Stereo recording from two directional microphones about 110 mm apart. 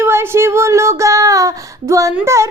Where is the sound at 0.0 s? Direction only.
25° right (ahead or behind).